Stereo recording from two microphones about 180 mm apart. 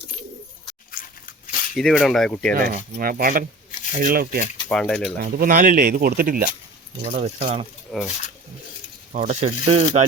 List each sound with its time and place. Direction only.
1.7 s speech: centre (ahead or behind)
2.6 s speech: 55° right (ahead or behind)
4.7 s speech: 5° left (ahead or behind)
5.2 s speech: 50° right (ahead or behind); by 7.7 s 35° right (ahead or behind)
7.9 s speech: centre (ahead or behind)
9.1 s speech: 40° right (ahead or behind)